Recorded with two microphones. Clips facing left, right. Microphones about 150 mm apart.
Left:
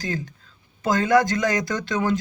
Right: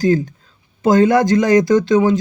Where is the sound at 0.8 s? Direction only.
25° right (ahead or behind).